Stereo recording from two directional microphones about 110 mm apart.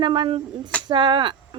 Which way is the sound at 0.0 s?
50° right (ahead or behind).